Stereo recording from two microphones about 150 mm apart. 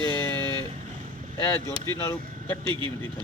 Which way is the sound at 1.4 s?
20° left (ahead or behind).